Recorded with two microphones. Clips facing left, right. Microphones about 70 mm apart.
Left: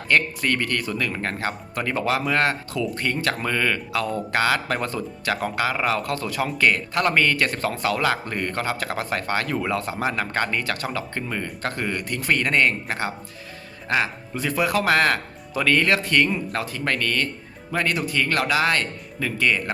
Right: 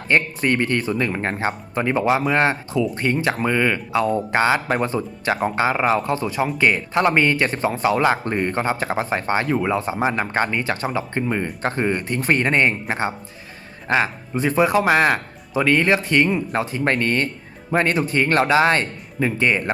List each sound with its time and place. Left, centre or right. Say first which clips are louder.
0.1 s speech: right 2 dB; right